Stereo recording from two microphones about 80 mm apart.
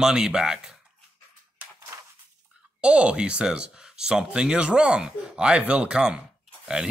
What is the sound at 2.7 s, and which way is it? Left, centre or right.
Speech, centre.